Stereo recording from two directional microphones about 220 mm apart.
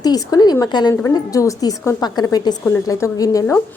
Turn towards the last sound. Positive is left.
turn(degrees=15)  # may be behind; listen again after turning